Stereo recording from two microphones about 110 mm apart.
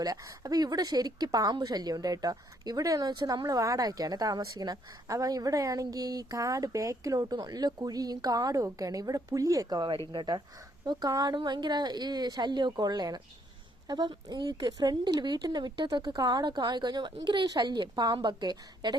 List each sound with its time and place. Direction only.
0.0 s a woman's voice: 35° right (ahead or behind)